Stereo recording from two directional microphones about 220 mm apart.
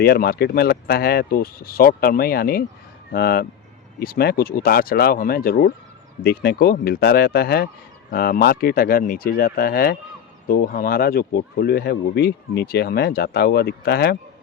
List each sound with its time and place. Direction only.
0.0 s speech: 45° left (ahead or behind)